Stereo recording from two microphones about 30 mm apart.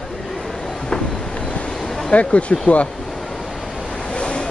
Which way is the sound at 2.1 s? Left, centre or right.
Left.